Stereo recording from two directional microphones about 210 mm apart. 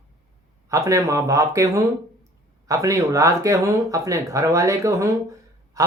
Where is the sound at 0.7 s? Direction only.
15° right (ahead or behind).